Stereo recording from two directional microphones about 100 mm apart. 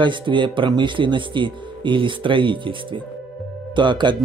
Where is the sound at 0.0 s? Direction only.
55° right (ahead or behind).